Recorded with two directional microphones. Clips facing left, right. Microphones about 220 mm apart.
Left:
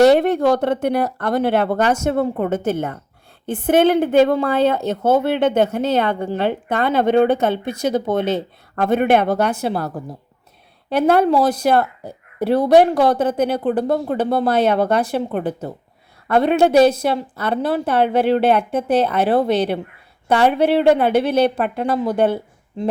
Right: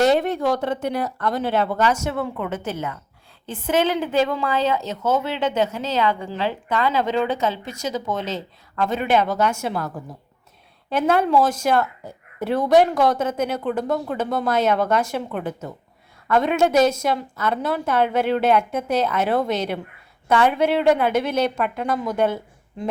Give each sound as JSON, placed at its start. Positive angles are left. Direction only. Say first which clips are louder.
{"t": 0.0, "sound": "speech", "louder": "left 6 dB", "side_deg": 65}
{"t": 2.0, "sound": "a woman's voice", "louder": "left 7 dB", "side_deg": 45}
{"t": 9.5, "sound": "a woman's voice", "louder": "left 4 dB", "side_deg": 35}
{"t": 11.3, "sound": "a woman's voice", "louder": "left 3 dB", "side_deg": 35}